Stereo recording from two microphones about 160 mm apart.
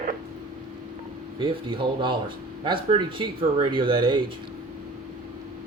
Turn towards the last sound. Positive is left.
turn(degrees=-30)  # may be behind; listen again after turning